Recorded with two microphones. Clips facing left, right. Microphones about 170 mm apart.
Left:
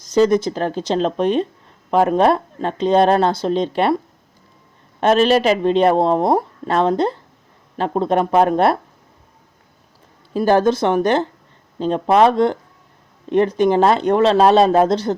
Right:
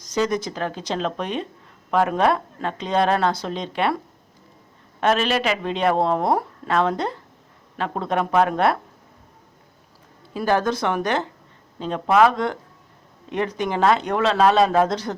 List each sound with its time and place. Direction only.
0.1 s speech: 30° left (ahead or behind)
4.9 s speech: 35° left (ahead or behind)
10.3 s speech: 30° left (ahead or behind)